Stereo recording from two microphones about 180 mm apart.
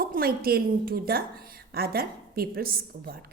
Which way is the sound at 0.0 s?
55° right (ahead or behind).